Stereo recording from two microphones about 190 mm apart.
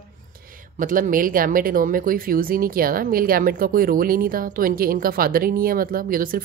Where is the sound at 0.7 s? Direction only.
45° right (ahead or behind).